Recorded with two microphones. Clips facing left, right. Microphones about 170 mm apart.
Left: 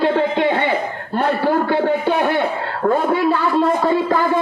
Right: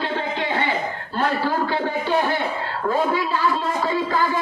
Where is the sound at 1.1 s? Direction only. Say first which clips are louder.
Left 5 dB; 60° left (ahead or behind).